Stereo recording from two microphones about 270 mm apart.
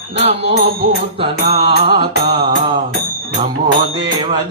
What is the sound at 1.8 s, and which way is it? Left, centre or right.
Music, centre.